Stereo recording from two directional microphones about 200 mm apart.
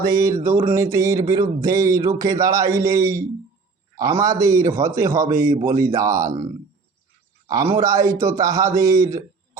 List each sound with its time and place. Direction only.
0.1 s speech: 15° right (ahead or behind)
7.4 s speech: 15° right (ahead or behind)